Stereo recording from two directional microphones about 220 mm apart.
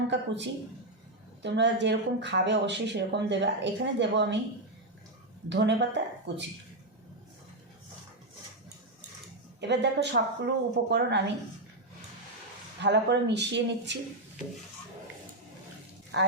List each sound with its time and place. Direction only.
0.1 s speech: 55° right (ahead or behind)
5.5 s speech: 50° right (ahead or behind)
9.6 s speech: 50° right (ahead or behind)
12.8 s speech: 50° right (ahead or behind)
16.1 s speech: 50° right (ahead or behind)